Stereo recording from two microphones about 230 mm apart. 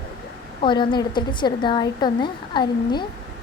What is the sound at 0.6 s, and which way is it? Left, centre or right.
A woman's voice, left.